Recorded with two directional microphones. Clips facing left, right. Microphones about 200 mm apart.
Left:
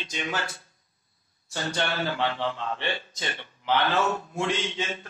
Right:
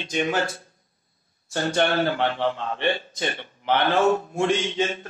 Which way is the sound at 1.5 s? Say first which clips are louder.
Right 7 dB; 55° right (ahead or behind).